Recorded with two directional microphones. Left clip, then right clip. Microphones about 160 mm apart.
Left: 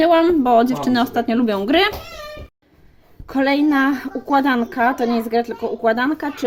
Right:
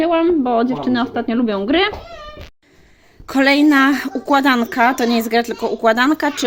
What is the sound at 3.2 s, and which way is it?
A woman's voice, 5° right (ahead or behind).